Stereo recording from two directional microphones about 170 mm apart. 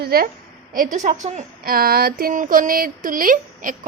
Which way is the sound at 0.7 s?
50° right (ahead or behind).